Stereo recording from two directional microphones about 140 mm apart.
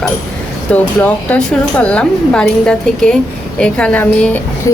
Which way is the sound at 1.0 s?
10° left (ahead or behind).